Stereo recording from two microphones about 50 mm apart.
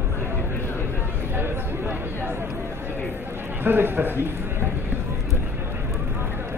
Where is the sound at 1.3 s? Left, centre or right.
Right.